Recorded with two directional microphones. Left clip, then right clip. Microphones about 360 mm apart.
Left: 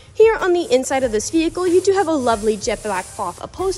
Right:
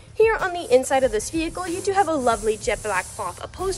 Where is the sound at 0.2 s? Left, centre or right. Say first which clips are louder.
Left 6 dB; left.